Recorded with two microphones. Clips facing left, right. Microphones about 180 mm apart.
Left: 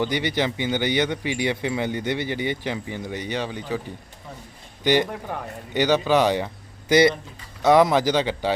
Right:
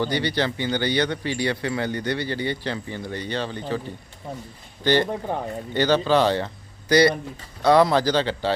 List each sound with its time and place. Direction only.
0.0 s speech: 15° left (ahead or behind)
4.8 s speech: 15° left (ahead or behind)
5.3 s speech: 25° right (ahead or behind)
5.7 s speech: 15° left (ahead or behind)